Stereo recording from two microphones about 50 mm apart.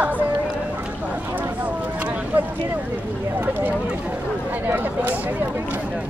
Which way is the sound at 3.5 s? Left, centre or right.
Right.